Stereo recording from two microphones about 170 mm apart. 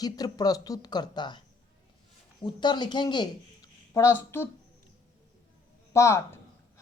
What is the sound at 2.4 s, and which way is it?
Speech, 25° left (ahead or behind).